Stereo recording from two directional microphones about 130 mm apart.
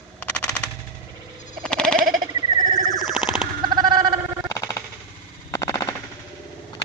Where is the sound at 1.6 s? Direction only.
5° left (ahead or behind).